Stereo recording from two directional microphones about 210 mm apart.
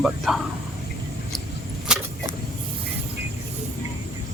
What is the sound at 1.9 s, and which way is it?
Vehicle, 5° right (ahead or behind).